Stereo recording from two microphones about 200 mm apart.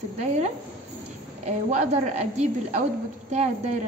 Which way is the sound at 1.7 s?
35° right (ahead or behind).